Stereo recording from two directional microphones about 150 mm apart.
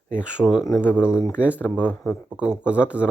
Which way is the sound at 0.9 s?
15° left (ahead or behind).